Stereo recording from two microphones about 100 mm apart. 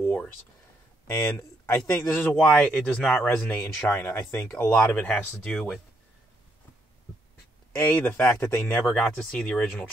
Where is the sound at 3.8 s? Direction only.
20° left (ahead or behind).